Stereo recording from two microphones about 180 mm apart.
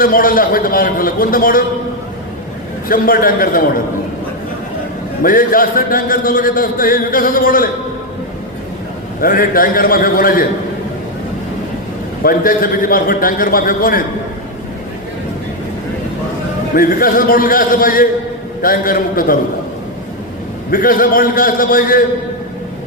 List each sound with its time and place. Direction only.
0.0 s a man's voice: 50° left (ahead or behind)
2.9 s a man's voice: 50° left (ahead or behind)
5.2 s a man's voice: 50° left (ahead or behind)
9.2 s a man's voice: 50° left (ahead or behind)
12.2 s a man's voice: 50° left (ahead or behind)
16.7 s a man's voice: 50° left (ahead or behind)
20.7 s a man's voice: 50° left (ahead or behind)